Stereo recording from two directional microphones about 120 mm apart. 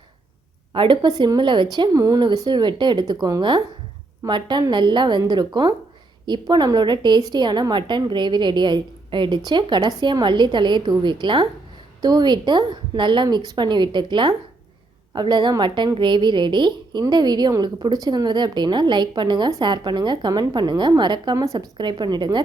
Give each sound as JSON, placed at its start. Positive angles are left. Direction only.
{"t": 0.7, "sound": "a woman's voice", "side_deg": -40}